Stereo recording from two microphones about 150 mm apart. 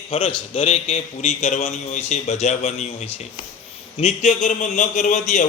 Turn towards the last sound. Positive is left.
turn(degrees=55)  # may be behind; listen again after turning